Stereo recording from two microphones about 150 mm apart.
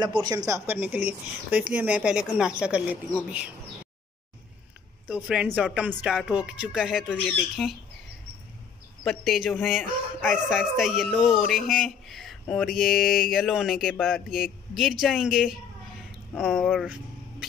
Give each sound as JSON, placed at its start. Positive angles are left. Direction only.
{"t": 0.0, "sound": "speech", "side_deg": -30}
{"t": 0.7, "sound": "a woman's voice", "side_deg": -10}
{"t": 5.0, "sound": "a woman's voice", "side_deg": -10}
{"t": 9.0, "sound": "speech", "side_deg": 0}